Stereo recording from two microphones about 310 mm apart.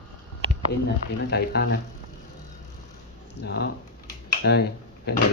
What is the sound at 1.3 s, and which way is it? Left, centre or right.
Speech, left.